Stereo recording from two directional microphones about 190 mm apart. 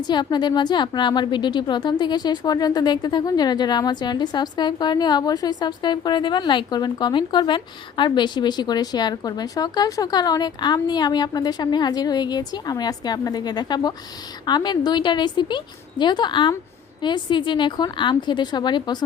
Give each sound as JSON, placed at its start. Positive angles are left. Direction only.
{"t": 0.0, "sound": "a woman's voice", "side_deg": 20}